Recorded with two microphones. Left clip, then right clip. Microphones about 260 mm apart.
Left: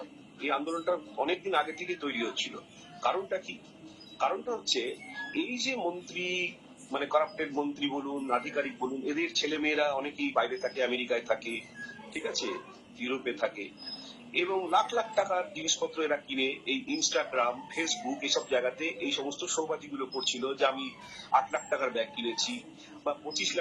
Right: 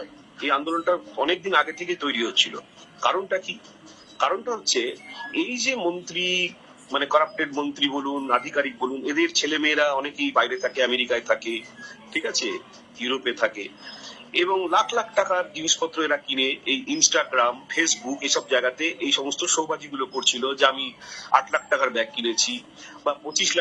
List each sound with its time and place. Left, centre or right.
0.3 s speech: right